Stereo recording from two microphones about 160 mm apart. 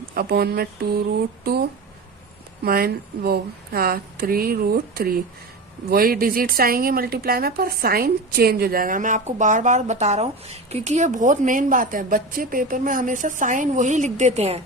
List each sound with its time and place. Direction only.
0.1 s speech: 70° right (ahead or behind)
2.6 s speech: 70° right (ahead or behind); by 14.6 s 40° right (ahead or behind)